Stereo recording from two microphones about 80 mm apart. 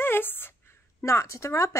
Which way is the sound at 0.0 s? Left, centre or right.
Left.